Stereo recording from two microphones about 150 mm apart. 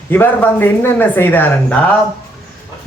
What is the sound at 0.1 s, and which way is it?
Speech, 15° left (ahead or behind).